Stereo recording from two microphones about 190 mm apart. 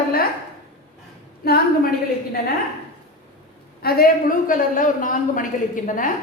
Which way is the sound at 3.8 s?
50° left (ahead or behind).